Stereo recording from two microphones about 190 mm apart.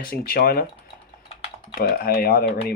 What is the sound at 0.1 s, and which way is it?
Speech, 50° left (ahead or behind).